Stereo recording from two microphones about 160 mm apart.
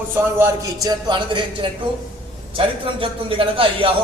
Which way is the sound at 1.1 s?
30° right (ahead or behind).